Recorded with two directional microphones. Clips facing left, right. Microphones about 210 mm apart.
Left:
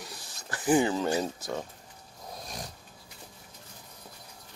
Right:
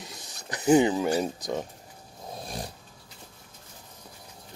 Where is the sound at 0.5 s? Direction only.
20° right (ahead or behind).